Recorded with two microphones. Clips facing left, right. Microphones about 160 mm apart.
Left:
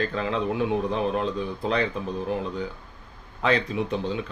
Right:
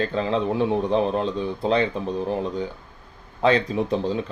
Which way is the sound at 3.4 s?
35° right (ahead or behind).